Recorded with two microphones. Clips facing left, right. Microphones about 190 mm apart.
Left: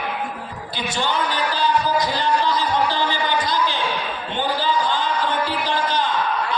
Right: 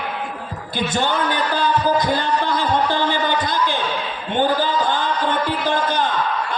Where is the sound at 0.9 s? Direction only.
50° right (ahead or behind).